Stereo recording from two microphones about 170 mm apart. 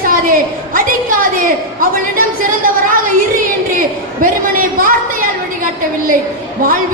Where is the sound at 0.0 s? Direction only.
55° right (ahead or behind).